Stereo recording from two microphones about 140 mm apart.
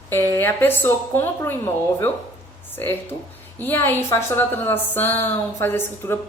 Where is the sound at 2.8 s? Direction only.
15° left (ahead or behind).